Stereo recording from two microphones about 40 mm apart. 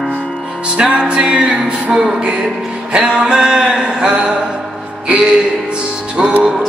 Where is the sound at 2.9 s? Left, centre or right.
Right.